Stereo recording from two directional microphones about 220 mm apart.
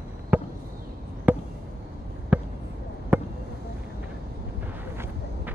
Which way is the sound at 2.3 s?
5° right (ahead or behind).